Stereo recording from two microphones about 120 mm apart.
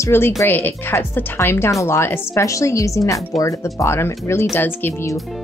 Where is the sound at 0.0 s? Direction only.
20° left (ahead or behind).